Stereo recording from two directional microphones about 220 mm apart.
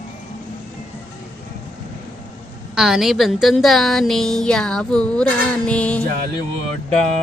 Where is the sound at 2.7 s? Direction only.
Centre (ahead or behind).